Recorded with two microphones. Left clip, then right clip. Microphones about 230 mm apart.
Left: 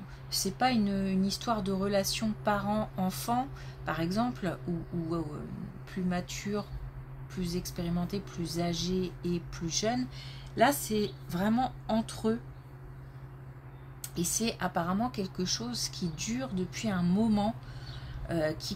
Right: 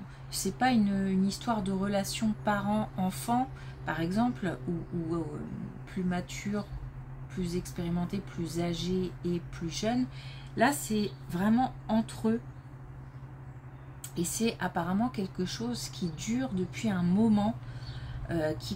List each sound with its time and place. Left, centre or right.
0.3 s speech: left
6.0 s speech: left
14.1 s speech: left